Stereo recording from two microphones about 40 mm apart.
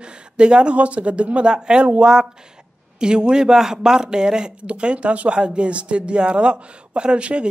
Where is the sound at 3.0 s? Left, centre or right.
Right.